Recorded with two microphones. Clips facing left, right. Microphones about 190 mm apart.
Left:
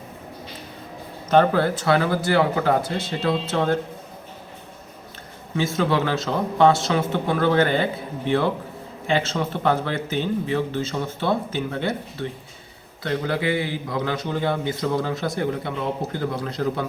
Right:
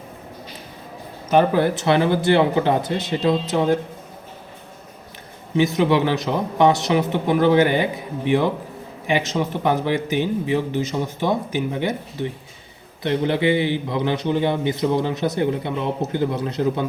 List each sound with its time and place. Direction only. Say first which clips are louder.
1.3 s a man's voice: right 1 dB; 15° right (ahead or behind)
5.5 s a man's voice: right 4 dB; 20° right (ahead or behind)